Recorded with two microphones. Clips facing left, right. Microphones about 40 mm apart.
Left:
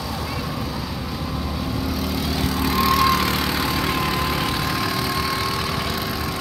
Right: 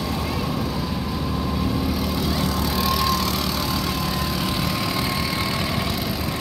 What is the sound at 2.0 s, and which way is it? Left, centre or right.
Vehicle, centre.